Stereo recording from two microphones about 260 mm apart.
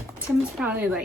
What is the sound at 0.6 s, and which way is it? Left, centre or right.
Speech, centre.